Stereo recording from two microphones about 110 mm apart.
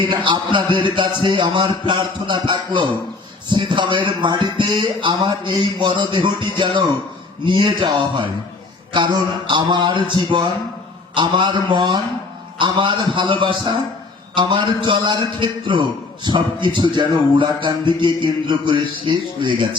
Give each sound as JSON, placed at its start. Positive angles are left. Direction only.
{"t": 0.1, "sound": "a man's voice", "side_deg": -50}